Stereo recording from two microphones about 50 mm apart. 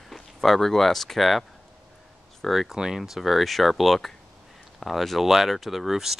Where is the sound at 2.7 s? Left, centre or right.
Centre.